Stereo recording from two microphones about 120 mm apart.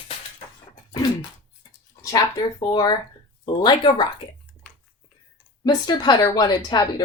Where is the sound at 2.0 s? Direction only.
30° left (ahead or behind).